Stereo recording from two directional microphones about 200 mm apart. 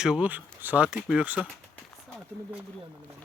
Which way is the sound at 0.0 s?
5° right (ahead or behind).